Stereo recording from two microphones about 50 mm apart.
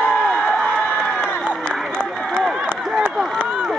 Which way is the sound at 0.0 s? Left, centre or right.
Centre.